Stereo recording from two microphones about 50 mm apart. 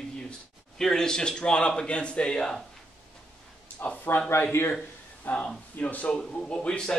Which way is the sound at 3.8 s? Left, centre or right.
Left.